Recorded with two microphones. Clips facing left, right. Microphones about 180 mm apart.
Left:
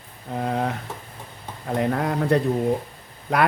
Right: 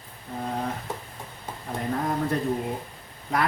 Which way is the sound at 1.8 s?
80° left.